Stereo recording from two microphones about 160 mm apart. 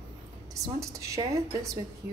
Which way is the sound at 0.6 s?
20° right (ahead or behind).